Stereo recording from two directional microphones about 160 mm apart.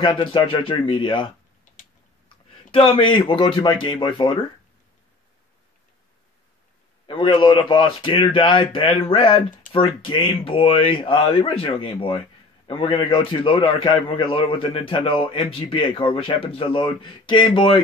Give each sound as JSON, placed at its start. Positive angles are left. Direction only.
{"t": 0.0, "sound": "a man's voice", "side_deg": 30}
{"t": 7.1, "sound": "a man's voice", "side_deg": 30}